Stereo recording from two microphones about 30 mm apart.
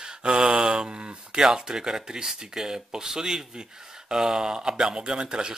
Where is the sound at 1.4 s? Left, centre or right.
Centre.